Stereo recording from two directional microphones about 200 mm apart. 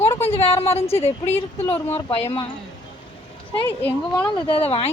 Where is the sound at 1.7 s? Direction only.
30° left (ahead or behind).